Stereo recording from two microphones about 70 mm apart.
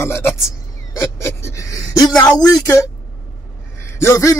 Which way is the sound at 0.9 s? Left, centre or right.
Left.